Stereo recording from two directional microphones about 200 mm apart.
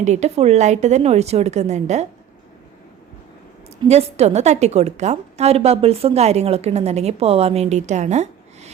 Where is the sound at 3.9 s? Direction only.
30° right (ahead or behind).